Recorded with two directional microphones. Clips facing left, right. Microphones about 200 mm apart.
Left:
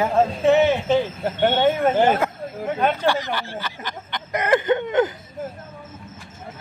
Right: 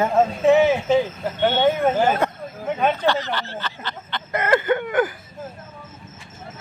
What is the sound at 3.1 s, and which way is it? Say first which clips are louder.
Snicker: even; 10° left (ahead or behind).